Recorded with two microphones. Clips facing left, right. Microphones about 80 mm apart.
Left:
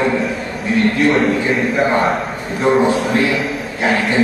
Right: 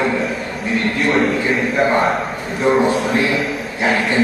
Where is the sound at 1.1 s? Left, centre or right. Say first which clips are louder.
Left 1 dB; centre.